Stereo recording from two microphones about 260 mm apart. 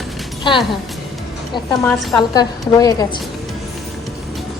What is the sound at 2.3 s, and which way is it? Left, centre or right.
Speech, centre.